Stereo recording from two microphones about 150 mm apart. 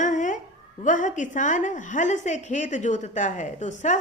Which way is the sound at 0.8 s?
60° left (ahead or behind).